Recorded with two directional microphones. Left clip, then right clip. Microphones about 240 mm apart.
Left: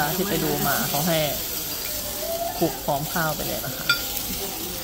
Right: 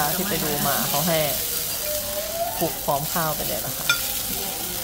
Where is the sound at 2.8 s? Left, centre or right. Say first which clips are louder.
Right 1 dB; centre.